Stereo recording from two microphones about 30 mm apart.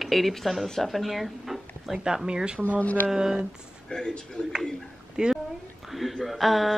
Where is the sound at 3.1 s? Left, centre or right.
Centre.